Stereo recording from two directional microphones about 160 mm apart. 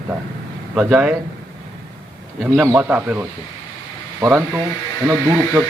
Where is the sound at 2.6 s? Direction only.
10° right (ahead or behind).